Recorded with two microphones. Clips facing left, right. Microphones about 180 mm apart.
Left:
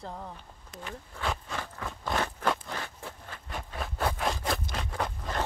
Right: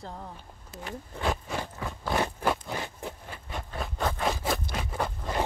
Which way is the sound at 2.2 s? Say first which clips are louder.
Right 2 dB; 10° right (ahead or behind).